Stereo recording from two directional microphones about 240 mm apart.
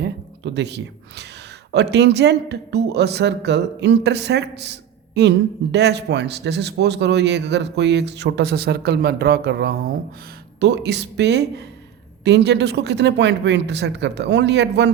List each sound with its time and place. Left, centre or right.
0.0 s speech: right